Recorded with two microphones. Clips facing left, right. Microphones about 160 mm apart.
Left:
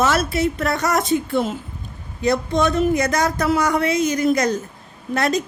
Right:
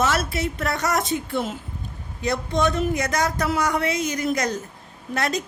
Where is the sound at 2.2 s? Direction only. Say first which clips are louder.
Left 4 dB; 35° left (ahead or behind).